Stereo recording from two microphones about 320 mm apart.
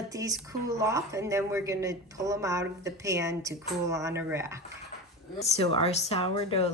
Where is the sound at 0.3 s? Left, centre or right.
Centre.